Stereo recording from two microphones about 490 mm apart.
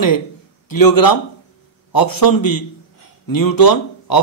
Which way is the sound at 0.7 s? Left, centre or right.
Left.